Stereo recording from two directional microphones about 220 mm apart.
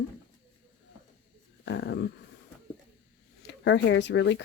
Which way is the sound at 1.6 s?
55° left (ahead or behind).